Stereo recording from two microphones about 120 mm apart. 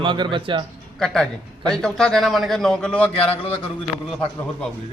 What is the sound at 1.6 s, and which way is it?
A man's voice, 5° left (ahead or behind).